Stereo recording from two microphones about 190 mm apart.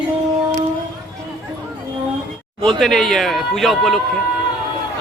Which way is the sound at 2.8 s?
Centre (ahead or behind).